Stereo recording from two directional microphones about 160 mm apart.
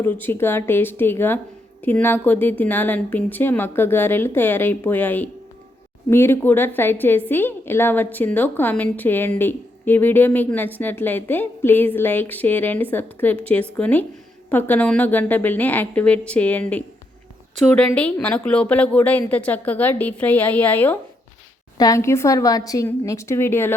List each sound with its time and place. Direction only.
0.0 s a woman's voice: 10° left (ahead or behind)
17.9 s a woman's voice: 10° left (ahead or behind)